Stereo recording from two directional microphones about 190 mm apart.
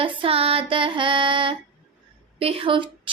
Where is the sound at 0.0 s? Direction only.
25° right (ahead or behind).